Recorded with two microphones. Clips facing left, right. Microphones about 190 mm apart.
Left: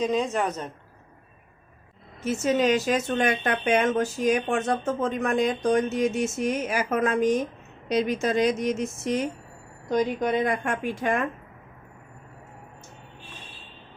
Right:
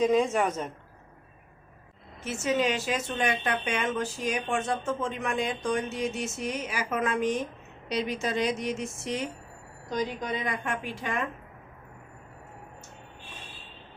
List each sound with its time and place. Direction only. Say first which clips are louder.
0.0 s a woman's voice: right 1 dB; 5° right (ahead or behind)
2.2 s speech: left 5 dB; 40° left (ahead or behind)
9.9 s speech: left 7 dB; 60° left (ahead or behind)